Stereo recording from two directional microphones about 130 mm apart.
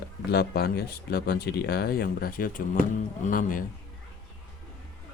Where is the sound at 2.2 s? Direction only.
90° left.